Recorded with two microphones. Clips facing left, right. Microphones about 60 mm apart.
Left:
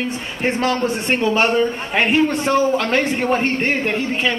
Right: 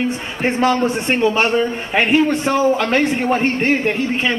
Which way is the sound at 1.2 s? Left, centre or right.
Centre.